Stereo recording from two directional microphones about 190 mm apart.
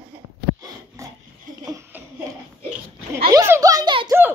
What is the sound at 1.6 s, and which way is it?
Chuckle, 15° right (ahead or behind).